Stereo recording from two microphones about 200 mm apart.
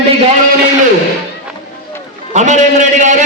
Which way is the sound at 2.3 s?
35° right (ahead or behind).